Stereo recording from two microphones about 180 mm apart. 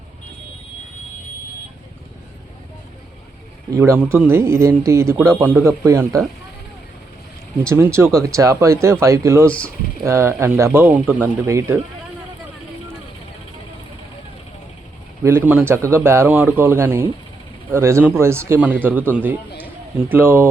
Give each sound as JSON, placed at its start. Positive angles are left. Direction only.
{"t": 3.7, "sound": "a man's voice", "side_deg": -15}
{"t": 7.7, "sound": "a man's voice", "side_deg": -15}
{"t": 15.2, "sound": "a man's voice", "side_deg": -15}